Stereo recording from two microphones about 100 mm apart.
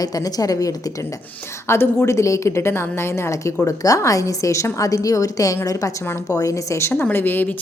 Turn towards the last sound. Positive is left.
turn(degrees=20)  # may be behind; listen again after turning